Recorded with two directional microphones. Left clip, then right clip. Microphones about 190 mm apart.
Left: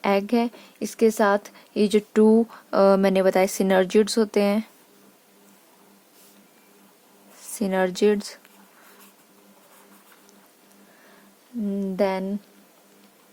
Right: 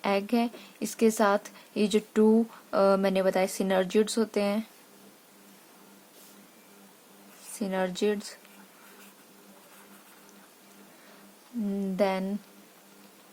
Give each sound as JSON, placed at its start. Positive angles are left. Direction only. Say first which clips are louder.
{"t": 0.0, "sound": "speech", "louder": "left 5 dB", "side_deg": 45}
{"t": 7.5, "sound": "speech", "louder": "left 7 dB", "side_deg": 50}
{"t": 11.7, "sound": "speech", "louder": "left 4 dB", "side_deg": 40}